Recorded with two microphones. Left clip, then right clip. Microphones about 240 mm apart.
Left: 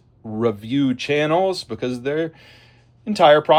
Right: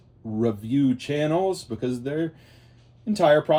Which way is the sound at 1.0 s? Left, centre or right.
Left.